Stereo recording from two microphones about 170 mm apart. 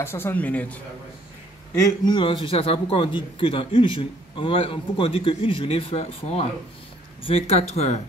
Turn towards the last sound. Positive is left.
turn(degrees=40)  # may be behind; listen again after turning